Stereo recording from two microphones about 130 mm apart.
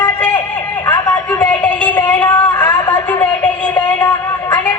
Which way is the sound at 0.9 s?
30° left (ahead or behind).